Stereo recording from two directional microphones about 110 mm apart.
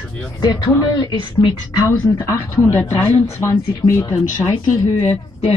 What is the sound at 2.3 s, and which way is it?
Speech, 25° left (ahead or behind).